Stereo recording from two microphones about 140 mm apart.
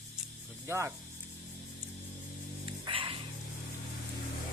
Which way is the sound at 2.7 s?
35° right (ahead or behind).